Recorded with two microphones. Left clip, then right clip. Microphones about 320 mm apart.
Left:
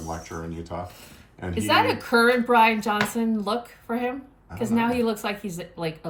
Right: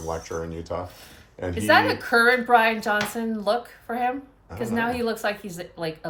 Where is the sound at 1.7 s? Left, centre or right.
Right.